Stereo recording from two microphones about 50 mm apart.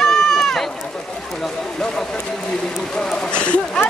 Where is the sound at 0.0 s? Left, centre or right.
Centre.